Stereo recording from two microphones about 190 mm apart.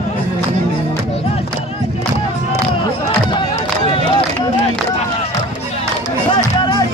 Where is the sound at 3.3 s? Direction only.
30° left (ahead or behind).